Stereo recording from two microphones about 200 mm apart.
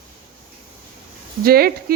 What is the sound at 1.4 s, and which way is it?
Speech, 50° right (ahead or behind).